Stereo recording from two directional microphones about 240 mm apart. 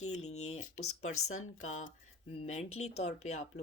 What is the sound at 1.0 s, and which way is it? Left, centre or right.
Speech, left.